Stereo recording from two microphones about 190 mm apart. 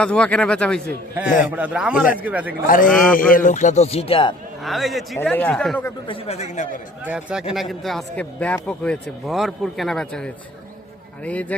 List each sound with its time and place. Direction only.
0.0 s speech: 5° left (ahead or behind)
1.5 s a man's voice: 10° right (ahead or behind)
2.6 s a man's voice: 45° left (ahead or behind)
2.9 s speech: 5° left (ahead or behind)
3.2 s speech: 45° left (ahead or behind); by 4.4 s 30° left (ahead or behind)
4.6 s speech: centre (ahead or behind)
6.1 s speech: 30° left (ahead or behind)
7.0 s speech: 5° right (ahead or behind)